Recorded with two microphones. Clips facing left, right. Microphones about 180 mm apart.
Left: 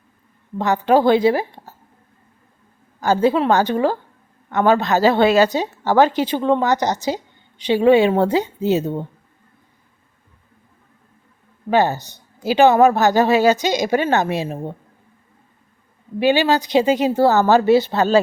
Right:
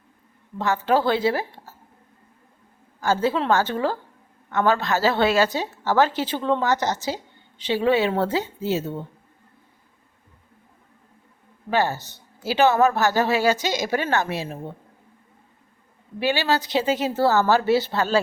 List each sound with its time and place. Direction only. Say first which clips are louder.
0.6 s a woman's voice: left 6 dB; 15° left (ahead or behind)
3.0 s a woman's voice: left 6 dB; 15° left (ahead or behind)
11.7 s speech: left 6 dB; 20° left (ahead or behind)
16.2 s speech: left 6 dB; 20° left (ahead or behind)